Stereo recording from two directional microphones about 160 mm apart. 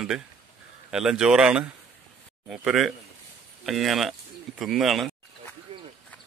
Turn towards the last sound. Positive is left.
turn(degrees=-35)  # may be behind; listen again after turning